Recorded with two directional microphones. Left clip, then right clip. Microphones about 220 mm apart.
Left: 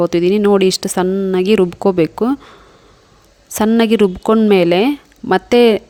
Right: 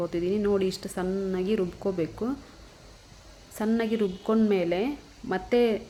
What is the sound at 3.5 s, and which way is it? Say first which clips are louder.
A woman's voice: left 14 dB; 45° left (ahead or behind).